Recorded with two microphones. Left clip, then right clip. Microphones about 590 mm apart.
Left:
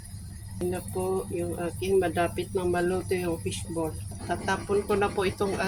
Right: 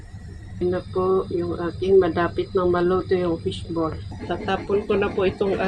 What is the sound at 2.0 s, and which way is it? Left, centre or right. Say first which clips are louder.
Speech: right 6 dB; left.